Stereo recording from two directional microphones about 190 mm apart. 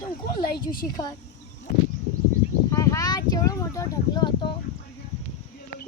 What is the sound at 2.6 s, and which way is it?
Speech, 15° left (ahead or behind).